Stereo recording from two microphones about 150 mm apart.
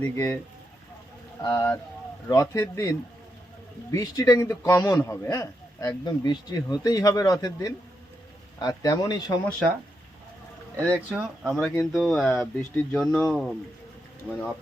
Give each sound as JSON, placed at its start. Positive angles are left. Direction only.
{"t": 0.0, "sound": "speech", "side_deg": 15}
{"t": 1.4, "sound": "speech", "side_deg": 20}
{"t": 3.9, "sound": "speech", "side_deg": 20}
{"t": 11.1, "sound": "speech", "side_deg": -5}
{"t": 12.4, "sound": "speech", "side_deg": 15}